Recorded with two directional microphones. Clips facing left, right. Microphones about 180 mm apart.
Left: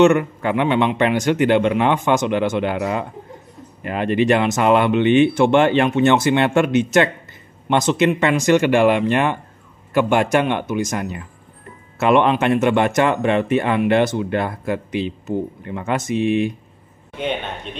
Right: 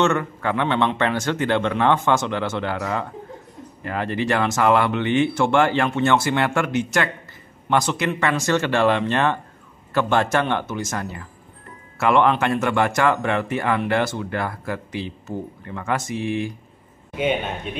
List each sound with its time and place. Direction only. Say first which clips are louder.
0.0 s a man's voice: left 6 dB; 15° left (ahead or behind)
17.1 s speech: right 2 dB; 5° right (ahead or behind)